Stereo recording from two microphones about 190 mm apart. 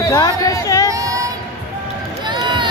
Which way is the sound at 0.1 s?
20° left (ahead or behind).